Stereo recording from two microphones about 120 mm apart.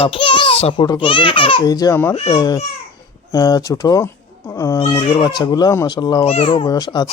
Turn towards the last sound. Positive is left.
turn(degrees=30)  # may be behind; listen again after turning